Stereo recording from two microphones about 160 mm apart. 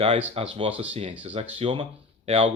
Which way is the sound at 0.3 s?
35° right (ahead or behind).